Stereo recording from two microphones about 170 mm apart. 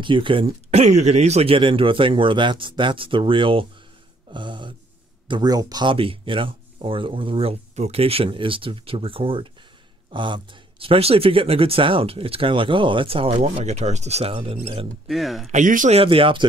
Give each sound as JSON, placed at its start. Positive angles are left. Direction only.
{"t": 0.0, "sound": "speech", "side_deg": -30}
{"t": 4.3, "sound": "a sound", "side_deg": -30}
{"t": 5.3, "sound": "speech", "side_deg": -25}
{"t": 15.0, "sound": "speech", "side_deg": 0}
{"t": 15.5, "sound": "speech", "side_deg": -50}
{"t": 16.0, "sound": "speech", "side_deg": -30}